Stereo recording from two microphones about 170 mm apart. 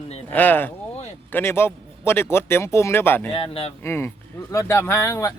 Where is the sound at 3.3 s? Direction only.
35° left (ahead or behind).